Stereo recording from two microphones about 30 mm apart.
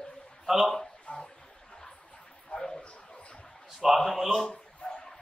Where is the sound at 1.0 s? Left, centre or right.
Left.